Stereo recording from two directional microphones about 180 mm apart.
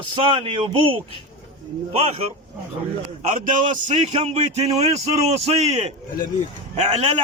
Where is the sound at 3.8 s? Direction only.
40° right (ahead or behind).